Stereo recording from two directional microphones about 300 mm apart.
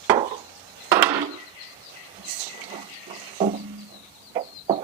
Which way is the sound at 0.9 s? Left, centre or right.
Centre.